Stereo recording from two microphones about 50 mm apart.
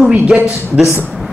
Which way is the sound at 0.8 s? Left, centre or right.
Centre.